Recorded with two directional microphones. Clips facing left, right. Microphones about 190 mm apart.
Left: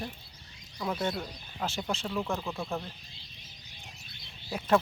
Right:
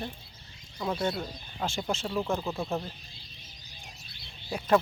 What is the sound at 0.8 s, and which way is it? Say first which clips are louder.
Speech: right 1 dB; 25° right (ahead or behind).